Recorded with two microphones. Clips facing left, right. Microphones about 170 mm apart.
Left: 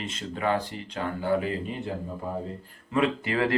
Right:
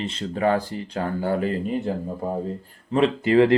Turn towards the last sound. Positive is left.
turn(degrees=-30)  # may be behind; listen again after turning